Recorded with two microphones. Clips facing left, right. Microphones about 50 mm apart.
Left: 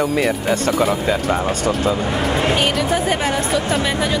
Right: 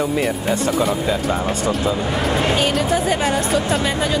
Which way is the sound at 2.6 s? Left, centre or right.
Left.